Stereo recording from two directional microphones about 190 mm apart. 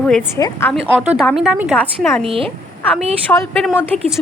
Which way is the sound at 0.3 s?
15° left (ahead or behind).